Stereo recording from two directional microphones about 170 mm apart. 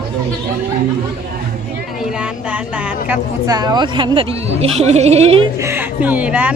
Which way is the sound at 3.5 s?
25° right (ahead or behind).